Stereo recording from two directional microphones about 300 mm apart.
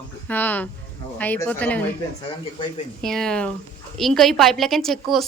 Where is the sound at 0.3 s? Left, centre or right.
Centre.